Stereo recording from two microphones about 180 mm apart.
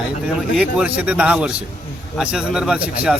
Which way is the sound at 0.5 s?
5° right (ahead or behind).